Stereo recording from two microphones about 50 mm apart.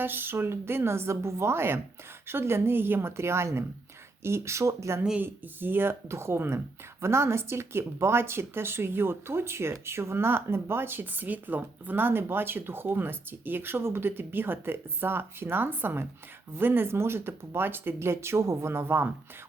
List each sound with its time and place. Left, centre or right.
0.0 s a woman's voice: right
5.2 s speech: right